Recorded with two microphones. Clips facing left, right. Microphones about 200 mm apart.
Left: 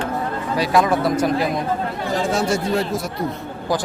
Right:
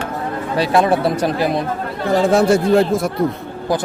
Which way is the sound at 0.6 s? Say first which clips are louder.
Right 3 dB; 30° right (ahead or behind).